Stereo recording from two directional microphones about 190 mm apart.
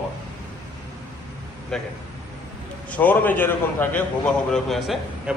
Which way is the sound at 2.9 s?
10° left (ahead or behind).